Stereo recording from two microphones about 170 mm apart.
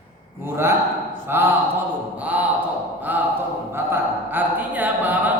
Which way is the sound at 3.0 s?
10° right (ahead or behind).